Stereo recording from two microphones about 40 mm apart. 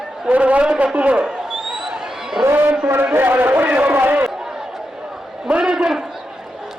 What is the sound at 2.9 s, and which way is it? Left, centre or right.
Speech, right.